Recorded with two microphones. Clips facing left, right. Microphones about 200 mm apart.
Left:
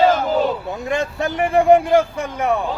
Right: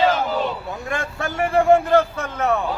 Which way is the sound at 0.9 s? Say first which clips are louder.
Left 6 dB; 20° left (ahead or behind).